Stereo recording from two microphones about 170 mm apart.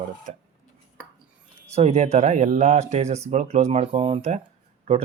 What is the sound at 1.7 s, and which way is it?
Speech, 40° right (ahead or behind).